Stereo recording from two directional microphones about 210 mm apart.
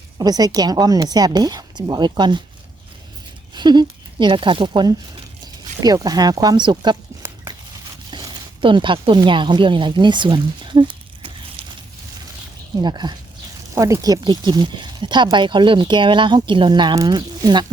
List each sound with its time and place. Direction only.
0.2 s speech: 20° right (ahead or behind)
3.5 s speech: 20° right (ahead or behind)
8.1 s speech: 20° right (ahead or behind)
12.8 s speech: 20° right (ahead or behind)